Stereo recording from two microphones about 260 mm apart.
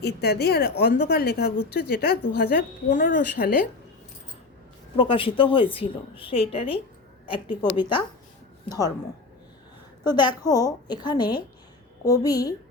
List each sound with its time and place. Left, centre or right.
0.0 s a woman's voice: left
4.9 s a woman's voice: left
10.0 s a woman's voice: centre